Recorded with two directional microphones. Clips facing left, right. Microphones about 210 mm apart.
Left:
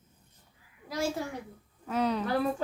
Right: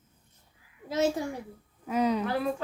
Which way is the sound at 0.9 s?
20° right (ahead or behind).